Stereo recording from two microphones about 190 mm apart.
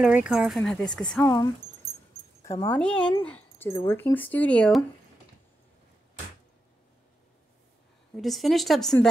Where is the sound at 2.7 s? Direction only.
5° left (ahead or behind).